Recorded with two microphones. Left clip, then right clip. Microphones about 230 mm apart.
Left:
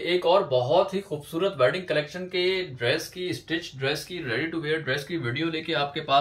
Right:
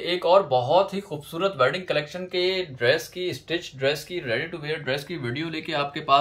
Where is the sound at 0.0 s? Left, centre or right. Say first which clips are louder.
Right 2 dB; centre.